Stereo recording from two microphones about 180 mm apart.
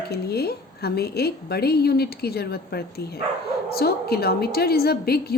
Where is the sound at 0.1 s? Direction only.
60° left (ahead or behind).